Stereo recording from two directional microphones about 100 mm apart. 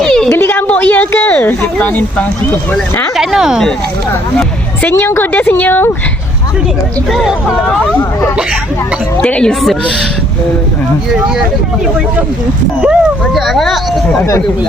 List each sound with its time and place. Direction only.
0.0 s a sound: 5° left (ahead or behind)
0.3 s a sound: 20° left (ahead or behind)
3.2 s speech: 5° right (ahead or behind)
4.8 s a woman's voice: 25° left (ahead or behind)
7.1 s speech: centre (ahead or behind)
9.2 s a woman's voice: 10° left (ahead or behind)
12.8 s speech: 10° right (ahead or behind)
13.3 s speech: centre (ahead or behind)